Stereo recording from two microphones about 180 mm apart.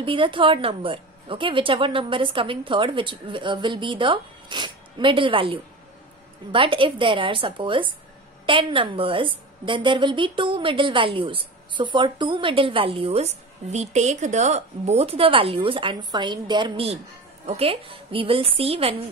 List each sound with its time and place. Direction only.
0.0 s a woman's voice: 30° right (ahead or behind)